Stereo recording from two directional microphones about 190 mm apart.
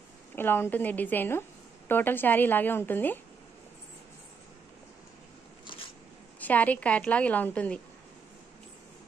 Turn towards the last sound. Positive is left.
turn(degrees=5)  # may be behind; listen again after turning